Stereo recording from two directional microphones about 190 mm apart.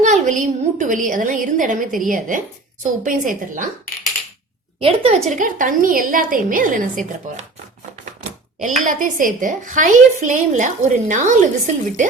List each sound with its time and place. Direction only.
0.0 s a woman's voice: 40° right (ahead or behind)
4.8 s a woman's voice: 30° right (ahead or behind)
5.3 s a woman's voice: 45° right (ahead or behind)
8.8 s a woman's voice: 45° right (ahead or behind)